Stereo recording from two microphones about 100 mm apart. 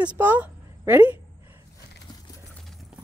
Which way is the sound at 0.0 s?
15° right (ahead or behind).